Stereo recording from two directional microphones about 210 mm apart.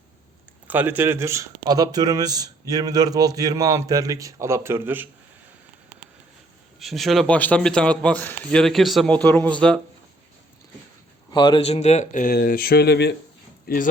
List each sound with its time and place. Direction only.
0.7 s a man's voice: 10° right (ahead or behind)
6.7 s a man's voice: centre (ahead or behind)
11.3 s speech: 20° left (ahead or behind); by 13.8 s 45° left (ahead or behind)